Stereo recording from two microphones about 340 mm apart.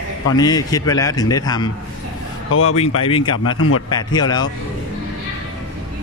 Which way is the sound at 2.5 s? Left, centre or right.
Left.